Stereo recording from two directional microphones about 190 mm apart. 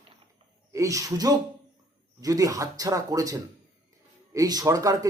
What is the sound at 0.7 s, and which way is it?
A man's voice, 15° right (ahead or behind).